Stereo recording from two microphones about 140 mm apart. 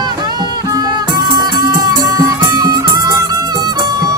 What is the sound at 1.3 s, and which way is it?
Music, 25° right (ahead or behind).